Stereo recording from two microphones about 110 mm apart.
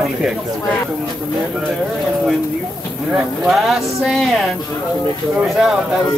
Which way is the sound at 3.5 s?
Centre (ahead or behind).